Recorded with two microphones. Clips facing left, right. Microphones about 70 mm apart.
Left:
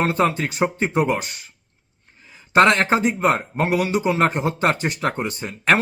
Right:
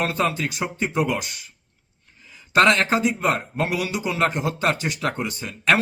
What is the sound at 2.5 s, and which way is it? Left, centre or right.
Speech, left.